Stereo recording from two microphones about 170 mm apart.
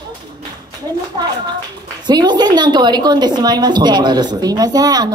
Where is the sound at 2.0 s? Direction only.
25° right (ahead or behind).